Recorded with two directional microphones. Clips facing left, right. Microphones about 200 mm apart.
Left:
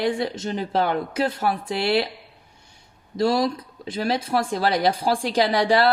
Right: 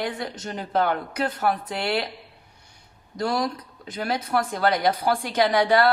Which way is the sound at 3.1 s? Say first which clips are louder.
Left 5 dB; 25° left (ahead or behind).